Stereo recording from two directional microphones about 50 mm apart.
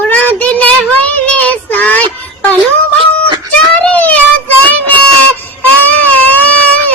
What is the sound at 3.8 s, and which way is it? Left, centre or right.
Child singing, left.